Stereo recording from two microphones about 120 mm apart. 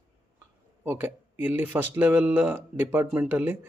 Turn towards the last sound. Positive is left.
turn(degrees=-15)  # may be behind; listen again after turning